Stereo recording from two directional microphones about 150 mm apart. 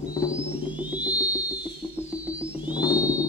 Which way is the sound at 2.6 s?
25° left (ahead or behind).